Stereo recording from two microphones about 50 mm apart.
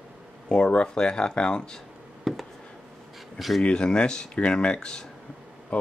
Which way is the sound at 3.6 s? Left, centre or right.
Centre.